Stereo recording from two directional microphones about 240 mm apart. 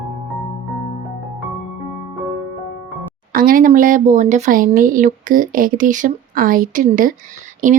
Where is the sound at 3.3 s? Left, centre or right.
Right.